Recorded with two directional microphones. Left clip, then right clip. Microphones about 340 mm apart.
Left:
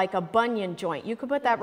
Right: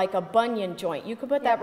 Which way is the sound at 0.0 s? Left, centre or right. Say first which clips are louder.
Right 1 dB; left.